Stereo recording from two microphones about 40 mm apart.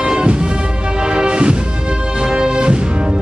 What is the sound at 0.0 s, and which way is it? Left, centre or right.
Music, right.